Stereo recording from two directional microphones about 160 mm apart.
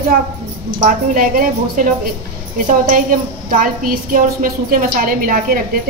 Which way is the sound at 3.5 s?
60° right (ahead or behind).